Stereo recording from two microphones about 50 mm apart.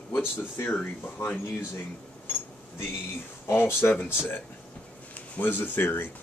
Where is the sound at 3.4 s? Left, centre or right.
Left.